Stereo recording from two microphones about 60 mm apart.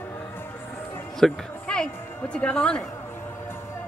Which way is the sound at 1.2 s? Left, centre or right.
Centre.